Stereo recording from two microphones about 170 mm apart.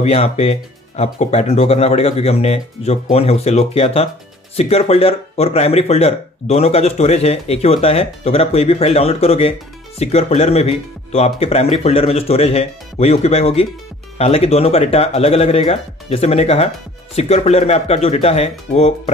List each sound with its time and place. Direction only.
0.0 s speech: 40° left (ahead or behind)